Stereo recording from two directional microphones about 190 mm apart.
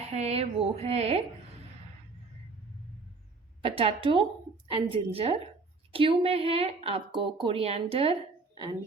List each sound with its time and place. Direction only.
0.1 s a woman's voice: 35° right (ahead or behind)
3.6 s a woman's voice: 30° right (ahead or behind)